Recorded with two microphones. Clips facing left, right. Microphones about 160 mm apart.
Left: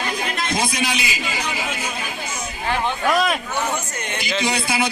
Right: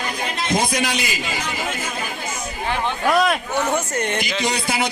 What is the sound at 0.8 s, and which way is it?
Speech, 50° right (ahead or behind).